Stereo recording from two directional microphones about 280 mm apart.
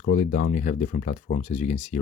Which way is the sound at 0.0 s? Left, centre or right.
Left.